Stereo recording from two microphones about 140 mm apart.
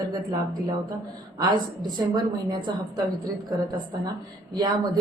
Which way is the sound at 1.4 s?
30° right (ahead or behind).